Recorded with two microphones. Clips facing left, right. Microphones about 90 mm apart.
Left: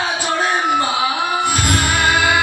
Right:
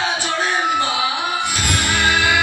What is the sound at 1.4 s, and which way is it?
Music, 45° left (ahead or behind).